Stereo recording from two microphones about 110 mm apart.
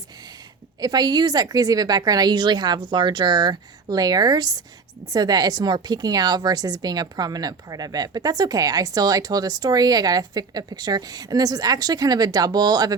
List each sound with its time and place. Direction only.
0.8 s a woman's voice: 35° right (ahead or behind)